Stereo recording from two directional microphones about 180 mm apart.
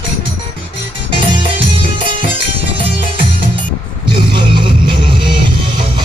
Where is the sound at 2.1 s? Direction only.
30° right (ahead or behind).